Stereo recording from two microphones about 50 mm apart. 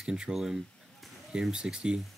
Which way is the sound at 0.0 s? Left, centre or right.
Centre.